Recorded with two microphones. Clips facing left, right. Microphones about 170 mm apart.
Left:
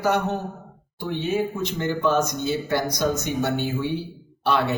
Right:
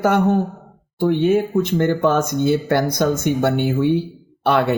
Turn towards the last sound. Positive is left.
turn(degrees=-55)  # may be behind; listen again after turning